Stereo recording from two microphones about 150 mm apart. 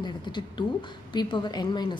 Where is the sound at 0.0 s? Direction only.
30° left (ahead or behind).